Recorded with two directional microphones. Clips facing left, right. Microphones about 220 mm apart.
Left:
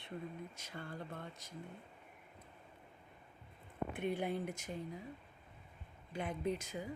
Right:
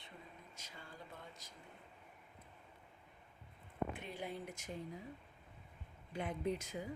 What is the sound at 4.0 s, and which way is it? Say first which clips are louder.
Speech: left 8 dB; 60° left (ahead or behind).